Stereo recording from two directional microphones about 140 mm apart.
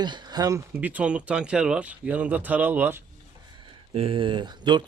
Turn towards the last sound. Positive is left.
turn(degrees=-30)  # may be behind; listen again after turning